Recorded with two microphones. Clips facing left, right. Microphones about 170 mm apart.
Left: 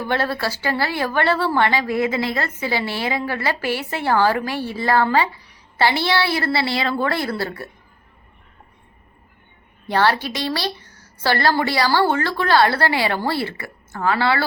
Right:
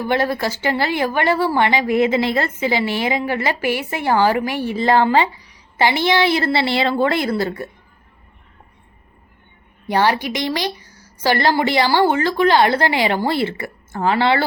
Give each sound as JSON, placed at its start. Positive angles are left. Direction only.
{"t": 0.1, "sound": "a woman's voice", "side_deg": -15}
{"t": 9.8, "sound": "a woman's voice", "side_deg": -15}